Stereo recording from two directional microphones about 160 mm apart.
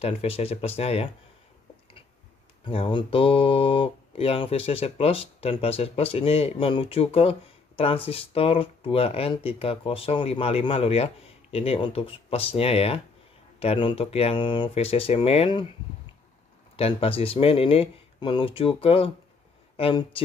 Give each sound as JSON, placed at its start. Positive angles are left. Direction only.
{"t": 0.0, "sound": "speech", "side_deg": 40}
{"t": 2.6, "sound": "speech", "side_deg": 30}
{"t": 16.7, "sound": "speech", "side_deg": 35}